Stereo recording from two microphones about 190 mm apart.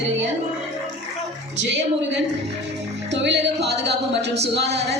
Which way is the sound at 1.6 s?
70° right (ahead or behind).